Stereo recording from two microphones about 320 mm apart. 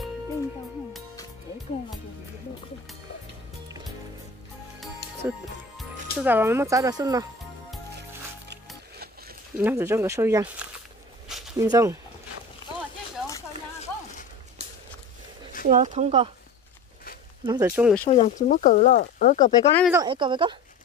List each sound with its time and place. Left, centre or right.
5.2 s speech: centre
9.6 s speech: centre
11.2 s a sound: centre
11.6 s speech: centre
15.6 s speech: right
17.5 s speech: centre
18.0 s speech: left
19.5 s speech: centre
19.9 s speech: centre